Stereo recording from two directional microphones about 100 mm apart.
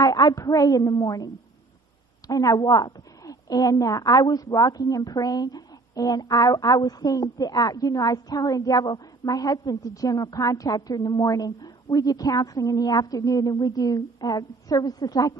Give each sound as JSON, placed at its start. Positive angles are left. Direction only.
{"t": 0.0, "sound": "a woman's voice", "side_deg": 40}